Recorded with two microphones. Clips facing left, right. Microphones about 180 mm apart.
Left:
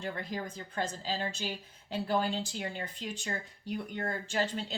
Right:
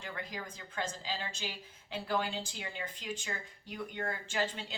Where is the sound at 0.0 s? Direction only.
35° left (ahead or behind).